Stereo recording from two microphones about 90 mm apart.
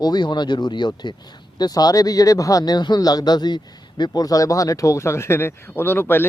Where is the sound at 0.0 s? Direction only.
55° left (ahead or behind).